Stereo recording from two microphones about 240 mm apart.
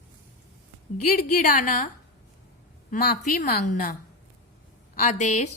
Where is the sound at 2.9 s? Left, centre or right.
Left.